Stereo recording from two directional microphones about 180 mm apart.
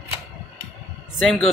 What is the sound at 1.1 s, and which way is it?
Speech, centre (ahead or behind).